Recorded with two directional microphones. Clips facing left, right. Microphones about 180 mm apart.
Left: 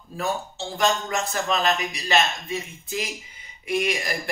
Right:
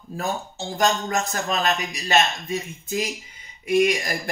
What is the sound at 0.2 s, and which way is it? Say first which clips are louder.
Speech: left 1 dB; 40° right (ahead or behind).